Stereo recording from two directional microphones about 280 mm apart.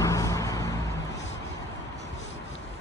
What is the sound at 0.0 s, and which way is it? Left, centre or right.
Vehicle, centre.